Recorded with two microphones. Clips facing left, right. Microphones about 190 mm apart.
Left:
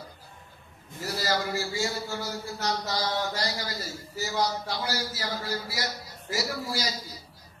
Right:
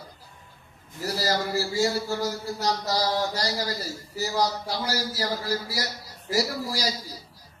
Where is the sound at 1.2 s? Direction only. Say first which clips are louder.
Right 2 dB; 35° right (ahead or behind).